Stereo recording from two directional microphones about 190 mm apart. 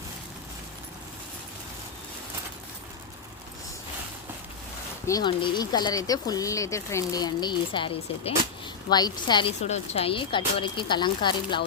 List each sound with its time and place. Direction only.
5.0 s speech: 20° left (ahead or behind)
9.6 s speech: 35° left (ahead or behind)